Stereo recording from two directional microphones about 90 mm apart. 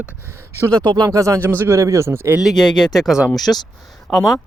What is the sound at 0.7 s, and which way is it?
Speech, 45° right (ahead or behind).